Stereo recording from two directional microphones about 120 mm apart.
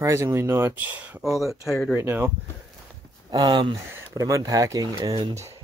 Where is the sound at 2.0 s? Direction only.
15° right (ahead or behind).